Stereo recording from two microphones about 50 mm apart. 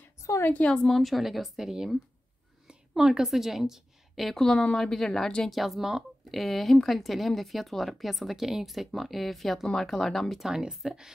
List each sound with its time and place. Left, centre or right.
0.2 s a sound: left
0.5 s speech: left
0.8 s speech: centre
3.0 s a woman's voice: centre
4.4 s speech: centre
5.5 s speech: centre
10.4 s speech: centre